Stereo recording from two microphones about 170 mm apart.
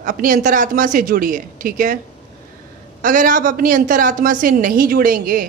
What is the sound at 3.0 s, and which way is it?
A woman's voice, 50° right (ahead or behind).